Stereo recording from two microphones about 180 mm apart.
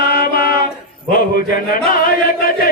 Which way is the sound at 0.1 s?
55° left (ahead or behind).